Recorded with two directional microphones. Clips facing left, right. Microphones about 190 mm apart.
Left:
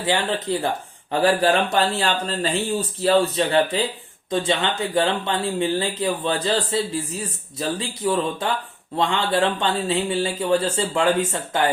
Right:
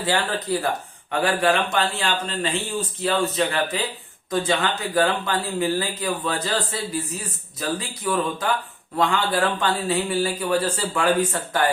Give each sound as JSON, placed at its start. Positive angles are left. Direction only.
{"t": 0.0, "sound": "speech", "side_deg": 20}